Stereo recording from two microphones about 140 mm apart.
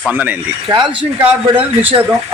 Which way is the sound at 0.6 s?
35° right (ahead or behind).